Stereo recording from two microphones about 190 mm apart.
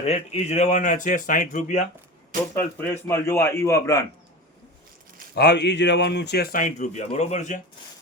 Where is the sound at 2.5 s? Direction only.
10° left (ahead or behind).